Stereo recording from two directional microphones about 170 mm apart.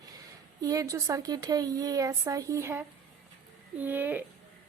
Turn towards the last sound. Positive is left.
turn(degrees=-10)  # may be behind; listen again after turning